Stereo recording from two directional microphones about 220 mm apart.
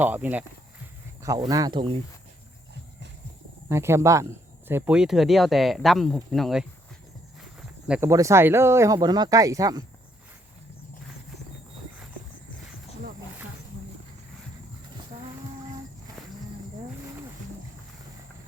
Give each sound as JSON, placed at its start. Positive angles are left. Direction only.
{"t": 0.0, "sound": "speech", "side_deg": -10}
{"t": 3.7, "sound": "speech", "side_deg": -10}